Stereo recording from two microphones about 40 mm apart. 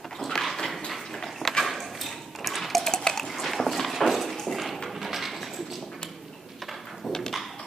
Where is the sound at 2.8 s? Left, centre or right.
Centre.